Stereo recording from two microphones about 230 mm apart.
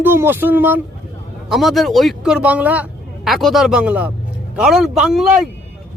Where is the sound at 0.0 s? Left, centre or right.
Centre.